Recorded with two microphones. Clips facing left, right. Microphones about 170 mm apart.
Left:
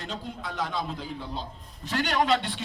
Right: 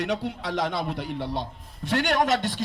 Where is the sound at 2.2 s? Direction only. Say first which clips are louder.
Right 1 dB; 45° right (ahead or behind).